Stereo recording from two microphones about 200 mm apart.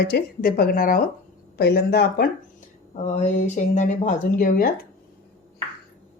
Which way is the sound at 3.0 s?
35° left (ahead or behind).